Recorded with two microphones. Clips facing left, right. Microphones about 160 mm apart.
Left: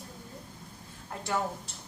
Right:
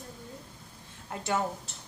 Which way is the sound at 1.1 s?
25° right (ahead or behind).